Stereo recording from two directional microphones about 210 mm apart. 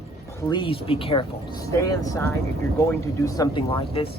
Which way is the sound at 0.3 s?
20° left (ahead or behind).